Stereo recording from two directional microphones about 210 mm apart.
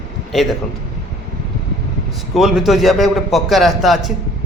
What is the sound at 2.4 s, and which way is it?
A man's voice, centre (ahead or behind).